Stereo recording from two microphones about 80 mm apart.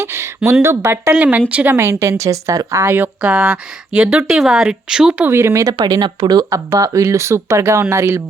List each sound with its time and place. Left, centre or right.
0.0 s a sound: right
0.6 s speech: right
1.1 s speech: centre
1.7 s speech: right
2.8 s speech: right
3.2 s speech: centre
5.3 s speech: right
5.9 s speech: right
6.7 s speech: right